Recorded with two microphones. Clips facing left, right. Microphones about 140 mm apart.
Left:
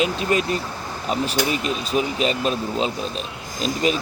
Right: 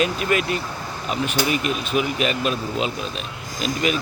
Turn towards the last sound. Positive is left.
turn(degrees=30)  # may be behind; listen again after turning